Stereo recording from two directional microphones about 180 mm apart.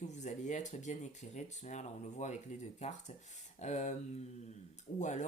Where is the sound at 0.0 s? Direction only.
40° left (ahead or behind).